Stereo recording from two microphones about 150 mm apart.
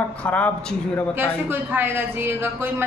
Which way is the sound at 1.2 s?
15° right (ahead or behind).